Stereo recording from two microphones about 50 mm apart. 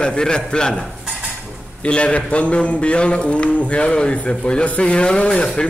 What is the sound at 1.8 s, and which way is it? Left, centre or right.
Speech, left.